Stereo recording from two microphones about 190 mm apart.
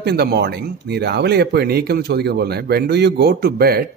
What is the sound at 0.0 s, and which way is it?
Speech, 60° right (ahead or behind).